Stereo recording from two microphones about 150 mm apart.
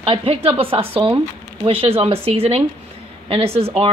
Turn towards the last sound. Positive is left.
turn(degrees=-40)  # may be behind; listen again after turning